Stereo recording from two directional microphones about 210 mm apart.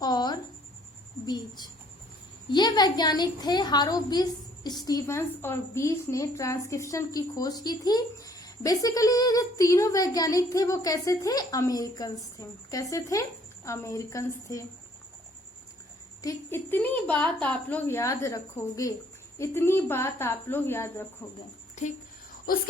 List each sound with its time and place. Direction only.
0.0 s a sound: 20° left (ahead or behind)
1.3 s a woman's voice: 20° left (ahead or behind)
16.2 s a woman's voice: 10° left (ahead or behind)
21.8 s speech: 35° left (ahead or behind)